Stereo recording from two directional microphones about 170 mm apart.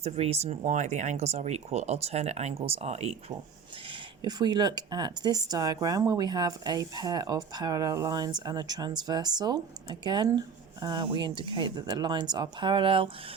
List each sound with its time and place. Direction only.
0.0 s speech: 40° right (ahead or behind)
4.2 s speech: 25° right (ahead or behind)